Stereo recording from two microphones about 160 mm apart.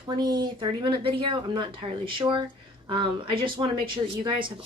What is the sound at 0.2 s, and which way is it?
Speech, 25° right (ahead or behind).